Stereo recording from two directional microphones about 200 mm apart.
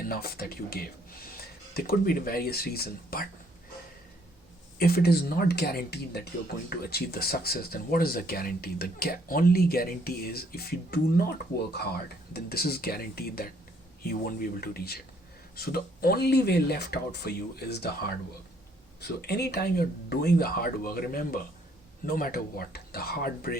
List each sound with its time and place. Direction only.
0.0 s speech: 50° left (ahead or behind)
4.8 s speech: 50° left (ahead or behind)
19.0 s speech: 55° left (ahead or behind)